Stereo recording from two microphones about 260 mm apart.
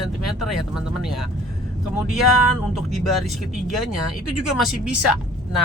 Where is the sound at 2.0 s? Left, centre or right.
Left.